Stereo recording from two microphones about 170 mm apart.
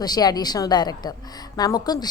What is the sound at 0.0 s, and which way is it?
A woman's voice, 25° left (ahead or behind).